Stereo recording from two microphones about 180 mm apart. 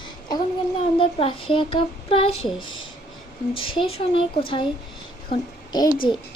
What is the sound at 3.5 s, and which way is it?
Speech, 30° left (ahead or behind).